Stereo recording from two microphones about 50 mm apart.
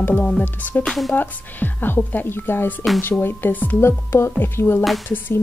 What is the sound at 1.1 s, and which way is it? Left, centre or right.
Speech, left.